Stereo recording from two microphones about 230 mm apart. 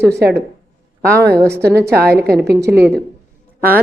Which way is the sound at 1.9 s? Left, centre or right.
Right.